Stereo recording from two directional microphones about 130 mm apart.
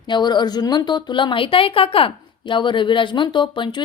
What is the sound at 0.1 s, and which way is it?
A woman's voice, 35° left (ahead or behind).